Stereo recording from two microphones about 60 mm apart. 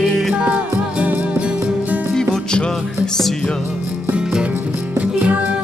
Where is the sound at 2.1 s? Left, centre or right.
Centre.